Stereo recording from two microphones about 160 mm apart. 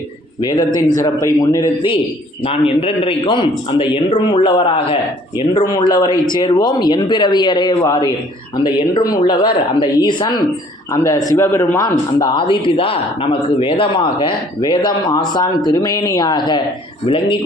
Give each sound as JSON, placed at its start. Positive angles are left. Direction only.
{"t": 0.9, "sound": "speech", "side_deg": 25}
{"t": 2.4, "sound": "a man's voice", "side_deg": 35}